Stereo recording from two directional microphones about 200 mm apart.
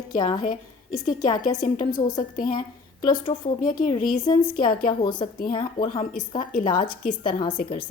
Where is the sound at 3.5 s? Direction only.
40° left (ahead or behind).